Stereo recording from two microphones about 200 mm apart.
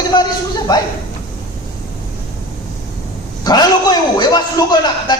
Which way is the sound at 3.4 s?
20° left (ahead or behind).